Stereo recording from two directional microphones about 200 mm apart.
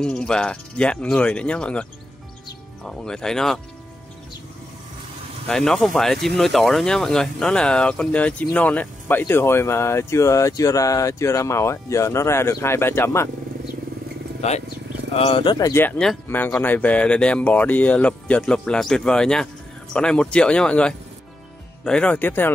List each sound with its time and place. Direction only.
0.0 s speech: 5° left (ahead or behind)
5.5 s speech: 5° left (ahead or behind)
14.4 s speech: 35° left (ahead or behind); by 22.5 s 10° left (ahead or behind)